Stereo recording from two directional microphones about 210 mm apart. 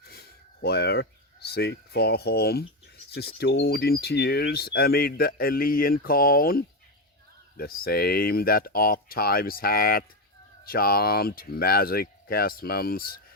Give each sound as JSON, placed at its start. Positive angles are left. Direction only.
{"t": 0.1, "sound": "speech", "side_deg": 50}